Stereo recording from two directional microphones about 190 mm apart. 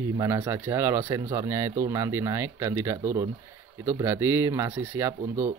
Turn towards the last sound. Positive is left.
turn(degrees=-15)  # may be behind; listen again after turning